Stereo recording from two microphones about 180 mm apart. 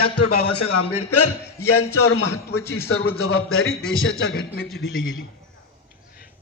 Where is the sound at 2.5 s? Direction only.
15° left (ahead or behind).